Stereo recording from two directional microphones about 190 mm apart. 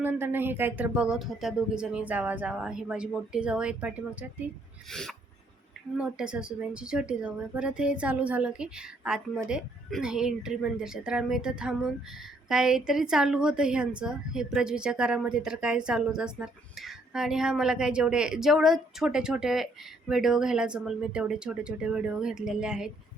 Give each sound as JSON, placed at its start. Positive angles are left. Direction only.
{"t": 0.0, "sound": "a woman's voice", "side_deg": -10}